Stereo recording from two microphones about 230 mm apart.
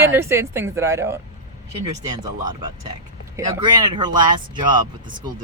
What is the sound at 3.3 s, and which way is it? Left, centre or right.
Speech, centre.